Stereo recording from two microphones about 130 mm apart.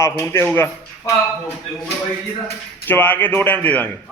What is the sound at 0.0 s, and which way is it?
Speech, 20° left (ahead or behind).